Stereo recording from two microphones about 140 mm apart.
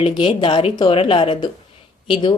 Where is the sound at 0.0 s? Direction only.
35° left (ahead or behind).